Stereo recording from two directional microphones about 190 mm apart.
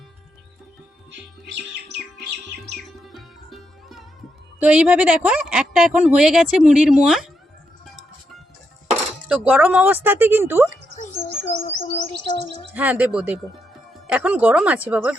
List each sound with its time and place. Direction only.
3.0 s music: centre (ahead or behind)
4.6 s speech: 5° right (ahead or behind)
9.3 s speech: 5° right (ahead or behind)
11.8 s bird: 30° left (ahead or behind)
12.7 s speech: 10° right (ahead or behind)